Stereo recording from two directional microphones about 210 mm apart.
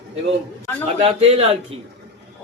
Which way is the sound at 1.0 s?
30° right (ahead or behind).